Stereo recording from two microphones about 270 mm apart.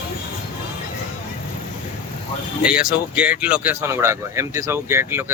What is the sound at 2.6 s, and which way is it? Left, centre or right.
Speech, centre.